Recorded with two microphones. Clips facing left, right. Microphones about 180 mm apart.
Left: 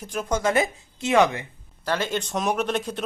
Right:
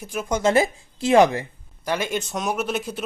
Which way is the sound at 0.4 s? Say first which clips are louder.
Right 6 dB; 30° right (ahead or behind).